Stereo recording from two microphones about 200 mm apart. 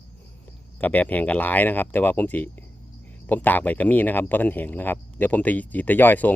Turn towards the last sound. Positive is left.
turn(degrees=10)  # may be behind; listen again after turning